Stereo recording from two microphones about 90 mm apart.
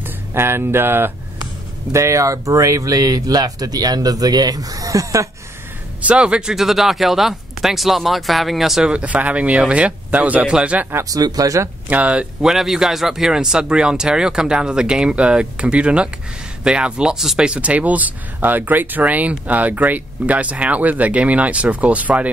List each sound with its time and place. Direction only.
0.0 s speech: 25° right (ahead or behind)
5.9 s speech: 15° right (ahead or behind)
11.1 s speech: 45° right (ahead or behind)
11.9 s speech: 15° right (ahead or behind)